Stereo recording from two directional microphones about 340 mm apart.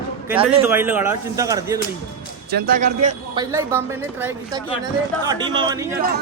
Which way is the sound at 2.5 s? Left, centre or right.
Right.